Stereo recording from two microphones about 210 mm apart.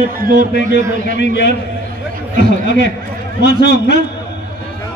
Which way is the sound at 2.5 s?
55° left (ahead or behind).